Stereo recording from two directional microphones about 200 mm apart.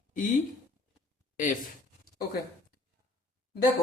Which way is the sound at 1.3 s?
40° left (ahead or behind).